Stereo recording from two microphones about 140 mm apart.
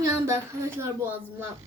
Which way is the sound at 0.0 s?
20° right (ahead or behind).